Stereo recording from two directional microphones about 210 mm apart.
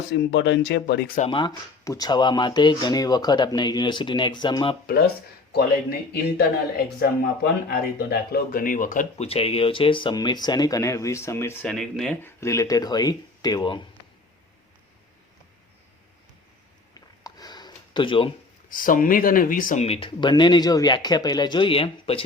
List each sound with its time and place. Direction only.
0.1 s speech: 55° left (ahead or behind)
1.2 s speech: 25° left (ahead or behind)
5.5 s speech: 50° left (ahead or behind); by 12.3 s centre (ahead or behind)
12.4 s speech: 15° left (ahead or behind)
17.2 s a sound: 20° left (ahead or behind)
18.7 s speech: 40° left (ahead or behind)